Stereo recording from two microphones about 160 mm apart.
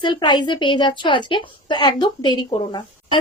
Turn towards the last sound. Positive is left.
turn(degrees=30)  # may be behind; listen again after turning